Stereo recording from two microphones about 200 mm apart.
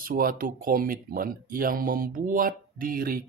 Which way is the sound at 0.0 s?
45° right (ahead or behind).